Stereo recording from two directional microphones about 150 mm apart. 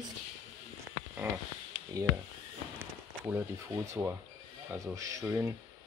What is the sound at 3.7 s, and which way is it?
Speech, 20° right (ahead or behind).